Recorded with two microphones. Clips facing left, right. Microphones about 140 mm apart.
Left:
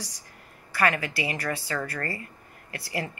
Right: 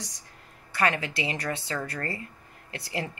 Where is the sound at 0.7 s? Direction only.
20° right (ahead or behind).